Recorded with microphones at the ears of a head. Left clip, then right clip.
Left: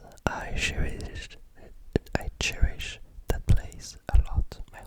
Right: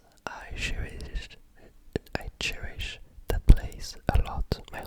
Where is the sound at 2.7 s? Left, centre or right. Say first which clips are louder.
Even; centre.